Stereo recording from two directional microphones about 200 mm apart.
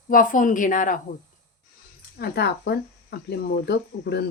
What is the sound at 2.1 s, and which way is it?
Speech, 50° left (ahead or behind).